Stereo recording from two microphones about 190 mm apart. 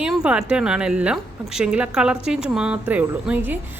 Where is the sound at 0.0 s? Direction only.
5° right (ahead or behind).